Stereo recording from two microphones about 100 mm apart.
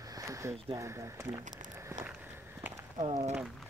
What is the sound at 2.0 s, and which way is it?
Walk, 20° right (ahead or behind).